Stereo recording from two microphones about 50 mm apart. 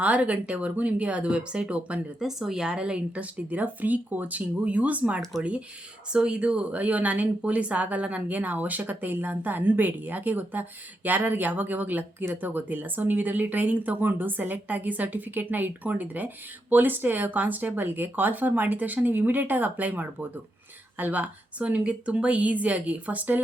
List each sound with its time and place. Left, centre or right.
0.0 s speech: right
2.1 s a woman's voice: centre
3.5 s speech: right